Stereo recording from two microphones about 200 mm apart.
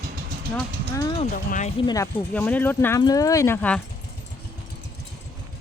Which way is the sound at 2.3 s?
5° left (ahead or behind).